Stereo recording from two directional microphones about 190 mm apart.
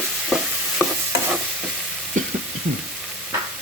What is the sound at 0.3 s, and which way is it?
Stir, centre (ahead or behind).